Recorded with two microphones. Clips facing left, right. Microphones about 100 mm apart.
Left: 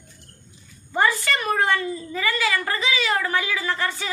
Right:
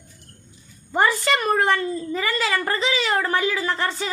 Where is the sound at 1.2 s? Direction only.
35° right (ahead or behind).